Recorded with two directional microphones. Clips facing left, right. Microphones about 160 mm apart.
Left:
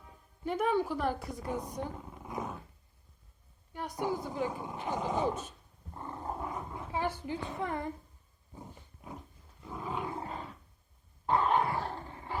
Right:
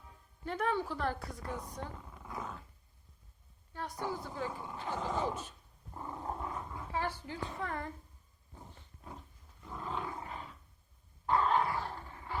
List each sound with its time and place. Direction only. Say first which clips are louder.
0.4 s speech: left 4 dB; 15° left (ahead or behind)
3.7 s speech: left 4 dB; 15° left (ahead or behind)
5.9 s dog: left 1 dB; centre (ahead or behind)
6.4 s roar: left 2 dB; 15° left (ahead or behind)
9.6 s roar: left 3 dB; 10° left (ahead or behind)
10.2 s roar: left 5 dB; 35° left (ahead or behind)
11.3 s dog: left 2 dB; 20° left (ahead or behind)